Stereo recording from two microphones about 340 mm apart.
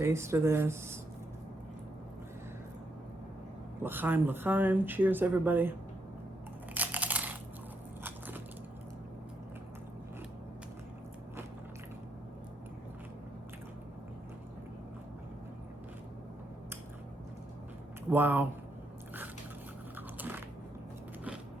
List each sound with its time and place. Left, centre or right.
0.0 s speech: centre
3.8 s speech: centre
6.7 s a sound: centre
18.1 s speech: centre
20.0 s biting: centre